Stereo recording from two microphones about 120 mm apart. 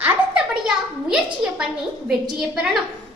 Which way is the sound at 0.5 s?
5° right (ahead or behind).